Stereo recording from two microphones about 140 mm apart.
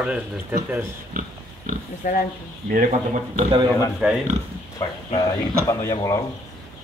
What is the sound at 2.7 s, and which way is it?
Speech, 65° right (ahead or behind).